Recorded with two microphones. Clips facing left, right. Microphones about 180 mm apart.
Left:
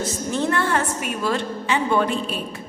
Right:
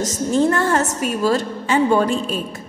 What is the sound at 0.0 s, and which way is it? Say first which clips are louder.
A woman's voice: right 6 dB; 40° right (ahead or behind).